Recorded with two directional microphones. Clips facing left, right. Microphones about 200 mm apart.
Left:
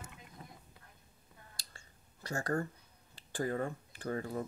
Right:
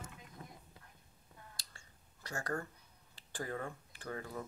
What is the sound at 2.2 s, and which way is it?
Speech, 45° left (ahead or behind).